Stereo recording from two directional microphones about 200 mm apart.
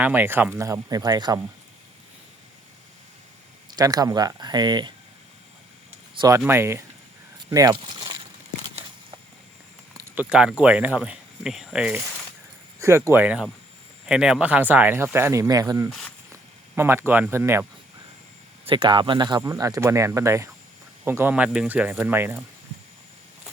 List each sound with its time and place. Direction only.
0.0 s speech: 10° right (ahead or behind)
3.8 s speech: 20° right (ahead or behind)
6.1 s speech: 15° right (ahead or behind)
7.8 s a sound: 20° right (ahead or behind)
10.0 s speech: 5° right (ahead or behind)
18.6 s speech: 25° right (ahead or behind)